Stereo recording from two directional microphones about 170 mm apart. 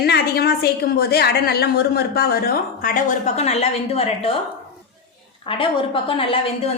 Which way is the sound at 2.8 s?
50° left (ahead or behind).